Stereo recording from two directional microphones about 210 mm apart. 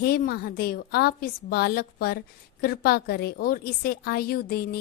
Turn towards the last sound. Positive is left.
turn(degrees=45)  # may be behind; listen again after turning